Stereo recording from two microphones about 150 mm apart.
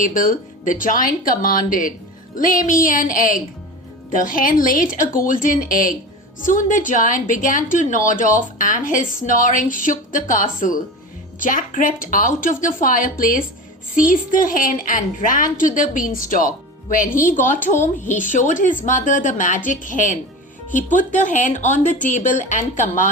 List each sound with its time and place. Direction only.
0.0 s speech: 65° left (ahead or behind)